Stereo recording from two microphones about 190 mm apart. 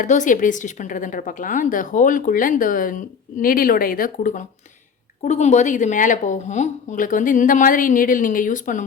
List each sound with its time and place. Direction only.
0.0 s a woman's voice: 40° left (ahead or behind)